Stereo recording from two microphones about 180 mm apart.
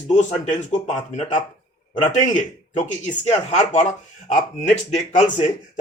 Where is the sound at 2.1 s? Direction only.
40° left (ahead or behind).